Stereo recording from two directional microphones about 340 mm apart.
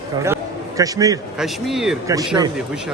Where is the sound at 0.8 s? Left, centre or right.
Centre.